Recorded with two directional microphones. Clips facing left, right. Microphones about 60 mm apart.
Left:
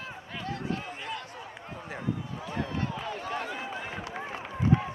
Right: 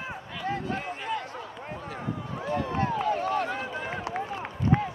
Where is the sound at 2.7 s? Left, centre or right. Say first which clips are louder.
Right 7 dB; right.